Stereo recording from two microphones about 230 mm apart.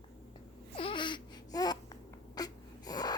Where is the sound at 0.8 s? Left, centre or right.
Left.